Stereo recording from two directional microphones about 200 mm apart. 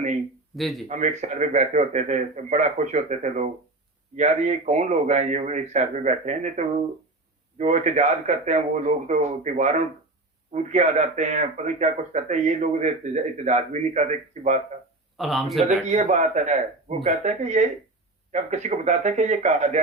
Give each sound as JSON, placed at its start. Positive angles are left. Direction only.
{"t": 0.5, "sound": "speech", "side_deg": 0}
{"t": 0.9, "sound": "a man's voice", "side_deg": -35}
{"t": 15.2, "sound": "speech", "side_deg": 0}
{"t": 15.6, "sound": "a man's voice", "side_deg": -35}